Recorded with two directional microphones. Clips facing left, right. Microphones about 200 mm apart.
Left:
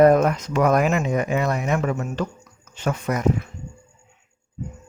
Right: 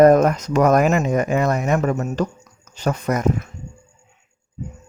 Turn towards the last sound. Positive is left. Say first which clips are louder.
# right 2 dB
turn(degrees=-45)  # may be behind; listen again after turning